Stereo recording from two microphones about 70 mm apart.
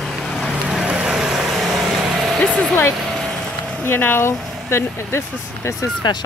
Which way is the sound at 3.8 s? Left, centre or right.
Left.